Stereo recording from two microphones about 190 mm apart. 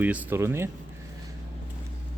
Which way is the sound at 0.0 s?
10° right (ahead or behind).